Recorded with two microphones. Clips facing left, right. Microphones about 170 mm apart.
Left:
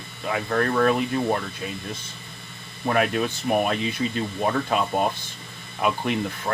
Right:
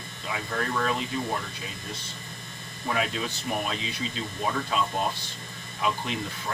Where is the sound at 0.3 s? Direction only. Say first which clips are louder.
Left 7 dB; 55° left (ahead or behind).